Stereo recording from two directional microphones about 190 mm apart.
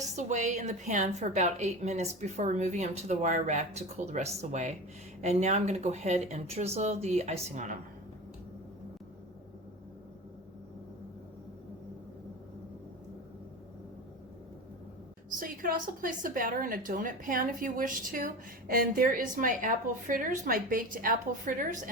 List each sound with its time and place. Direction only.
0.2 s a woman's voice: 40° right (ahead or behind)
15.4 s a woman's voice: 45° right (ahead or behind)